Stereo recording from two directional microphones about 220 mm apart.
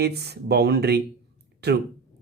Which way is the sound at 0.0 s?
45° right (ahead or behind).